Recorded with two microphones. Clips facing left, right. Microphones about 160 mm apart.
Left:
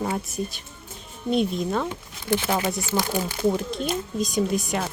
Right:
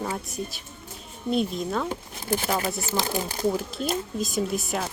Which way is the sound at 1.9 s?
35° right (ahead or behind).